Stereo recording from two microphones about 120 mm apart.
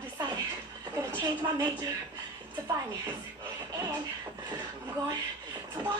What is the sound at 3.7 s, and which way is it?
Music, 35° right (ahead or behind).